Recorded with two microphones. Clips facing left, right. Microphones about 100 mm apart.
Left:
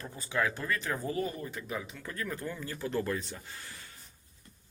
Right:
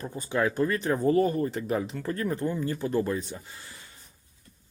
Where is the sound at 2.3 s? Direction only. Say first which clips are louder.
Right 9 dB; 25° right (ahead or behind).